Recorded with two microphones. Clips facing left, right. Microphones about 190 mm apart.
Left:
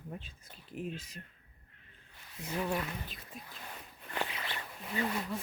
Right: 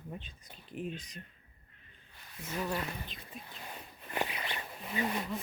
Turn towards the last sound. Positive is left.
turn(degrees=-20)  # may be behind; listen again after turning